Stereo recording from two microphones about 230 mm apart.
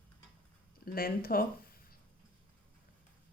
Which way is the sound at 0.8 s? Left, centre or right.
Left.